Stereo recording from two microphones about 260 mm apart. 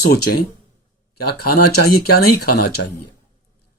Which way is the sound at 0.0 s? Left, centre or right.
Left.